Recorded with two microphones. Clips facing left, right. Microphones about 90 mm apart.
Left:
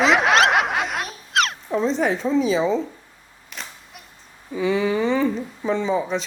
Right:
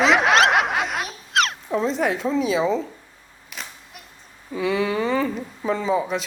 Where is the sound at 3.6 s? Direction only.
Centre (ahead or behind).